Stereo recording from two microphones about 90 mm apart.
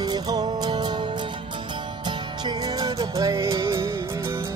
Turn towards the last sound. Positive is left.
turn(degrees=-35)  # may be behind; listen again after turning